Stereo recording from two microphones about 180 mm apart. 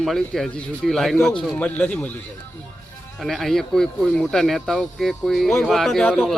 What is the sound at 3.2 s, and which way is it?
A man's voice, centre (ahead or behind).